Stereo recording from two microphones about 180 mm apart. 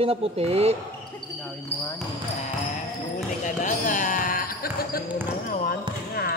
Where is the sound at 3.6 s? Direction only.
45° left (ahead or behind).